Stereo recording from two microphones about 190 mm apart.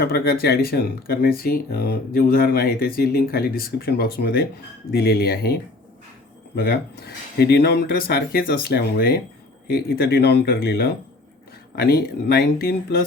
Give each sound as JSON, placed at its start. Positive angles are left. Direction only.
{"t": 0.0, "sound": "speech", "side_deg": 55}
{"t": 6.6, "sound": "speech", "side_deg": 55}